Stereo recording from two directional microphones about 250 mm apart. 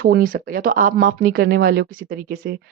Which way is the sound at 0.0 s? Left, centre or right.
Right.